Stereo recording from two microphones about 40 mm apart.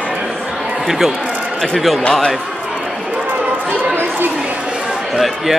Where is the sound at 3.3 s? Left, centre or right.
Right.